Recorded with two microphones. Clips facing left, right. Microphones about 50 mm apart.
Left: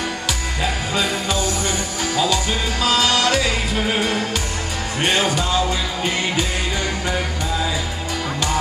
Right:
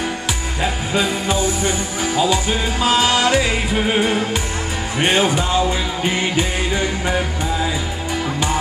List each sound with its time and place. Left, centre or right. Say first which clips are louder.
0.6 s music: right 3 dB; right